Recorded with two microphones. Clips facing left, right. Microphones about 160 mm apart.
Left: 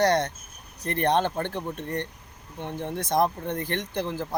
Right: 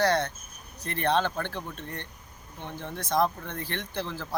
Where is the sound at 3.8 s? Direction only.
15° left (ahead or behind).